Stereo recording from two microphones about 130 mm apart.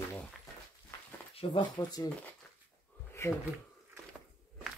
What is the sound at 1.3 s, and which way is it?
Speech, 40° left (ahead or behind).